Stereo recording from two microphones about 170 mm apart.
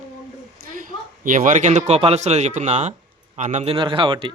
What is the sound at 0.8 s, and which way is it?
A man's voice, 55° right (ahead or behind).